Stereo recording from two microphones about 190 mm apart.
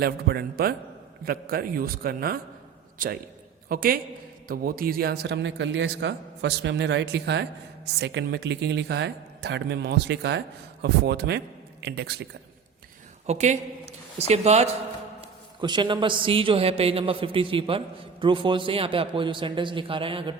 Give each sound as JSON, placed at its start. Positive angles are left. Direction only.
{"t": 0.0, "sound": "a man's voice", "side_deg": -55}
{"t": 13.2, "sound": "a man's voice", "side_deg": -35}